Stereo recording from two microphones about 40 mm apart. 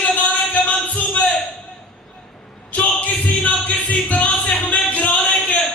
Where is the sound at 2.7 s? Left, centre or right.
Left.